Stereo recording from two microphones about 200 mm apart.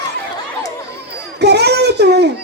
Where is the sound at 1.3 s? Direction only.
55° right (ahead or behind).